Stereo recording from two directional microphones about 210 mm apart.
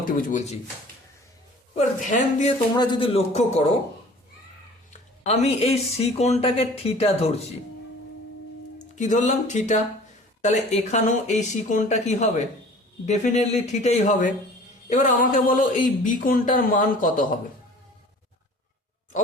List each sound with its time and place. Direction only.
0.0 s speech: 40° left (ahead or behind)
1.7 s speech: 35° left (ahead or behind)
2.7 s speech: 20° left (ahead or behind)
5.2 s speech: 30° left (ahead or behind)
9.0 s speech: 35° left (ahead or behind)